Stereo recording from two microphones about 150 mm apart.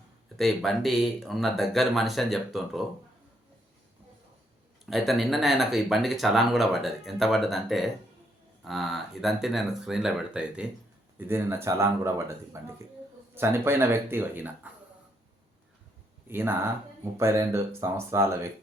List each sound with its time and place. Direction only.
0.3 s speech: centre (ahead or behind)
4.9 s speech: centre (ahead or behind)
16.3 s speech: 15° right (ahead or behind)